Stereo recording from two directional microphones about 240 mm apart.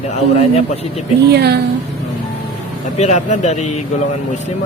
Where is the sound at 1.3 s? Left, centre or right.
Right.